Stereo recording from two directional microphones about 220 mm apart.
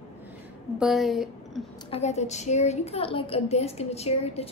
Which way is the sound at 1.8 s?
30° left (ahead or behind).